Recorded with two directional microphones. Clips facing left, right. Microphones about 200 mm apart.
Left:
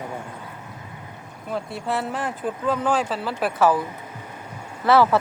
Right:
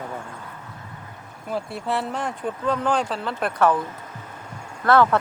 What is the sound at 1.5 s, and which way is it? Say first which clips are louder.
Speech: even; centre (ahead or behind).